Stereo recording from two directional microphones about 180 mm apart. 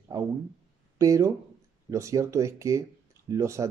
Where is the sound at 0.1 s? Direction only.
20° right (ahead or behind).